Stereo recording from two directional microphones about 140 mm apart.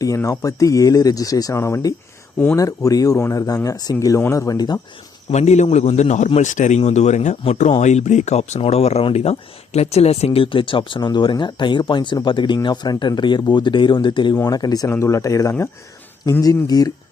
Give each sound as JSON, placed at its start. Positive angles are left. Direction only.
{"t": 0.0, "sound": "speech", "side_deg": 25}
{"t": 5.3, "sound": "a man's voice", "side_deg": 50}